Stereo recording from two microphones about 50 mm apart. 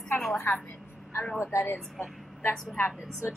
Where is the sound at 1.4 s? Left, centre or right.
Left.